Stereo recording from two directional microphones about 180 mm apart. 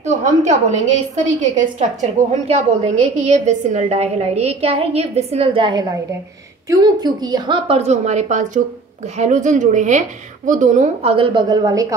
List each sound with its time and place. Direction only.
0.0 s a woman's voice: 40° right (ahead or behind); by 11.9 s 20° right (ahead or behind)